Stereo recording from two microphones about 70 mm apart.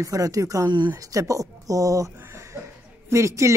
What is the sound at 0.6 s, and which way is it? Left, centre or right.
Speech, right.